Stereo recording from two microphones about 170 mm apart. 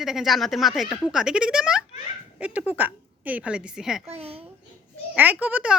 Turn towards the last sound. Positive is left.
turn(degrees=-10)  # may be behind; listen again after turning